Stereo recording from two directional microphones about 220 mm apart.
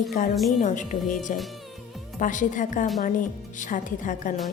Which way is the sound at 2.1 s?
35° left (ahead or behind).